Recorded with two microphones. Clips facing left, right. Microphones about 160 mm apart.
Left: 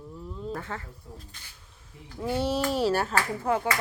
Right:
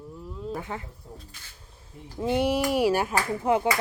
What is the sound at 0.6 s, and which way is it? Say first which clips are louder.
Speech: right 2 dB; 15° right (ahead or behind).